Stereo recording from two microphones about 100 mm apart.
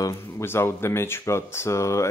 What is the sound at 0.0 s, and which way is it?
Speech, 30° left (ahead or behind).